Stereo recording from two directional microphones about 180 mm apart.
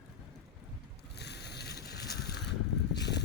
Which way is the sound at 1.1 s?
65° left (ahead or behind).